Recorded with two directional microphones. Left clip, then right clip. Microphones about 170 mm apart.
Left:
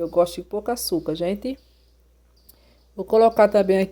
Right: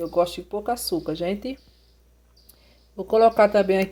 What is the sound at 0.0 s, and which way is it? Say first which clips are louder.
Speech: left 2 dB; 10° left (ahead or behind).